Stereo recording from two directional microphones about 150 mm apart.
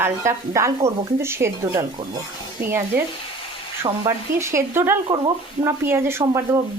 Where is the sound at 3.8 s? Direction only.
20° right (ahead or behind).